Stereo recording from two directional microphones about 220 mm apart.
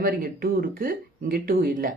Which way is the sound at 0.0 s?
40° right (ahead or behind).